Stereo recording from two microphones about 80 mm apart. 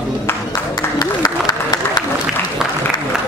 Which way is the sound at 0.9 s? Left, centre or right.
Left.